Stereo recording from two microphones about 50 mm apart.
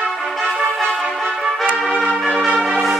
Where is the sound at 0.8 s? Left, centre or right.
Right.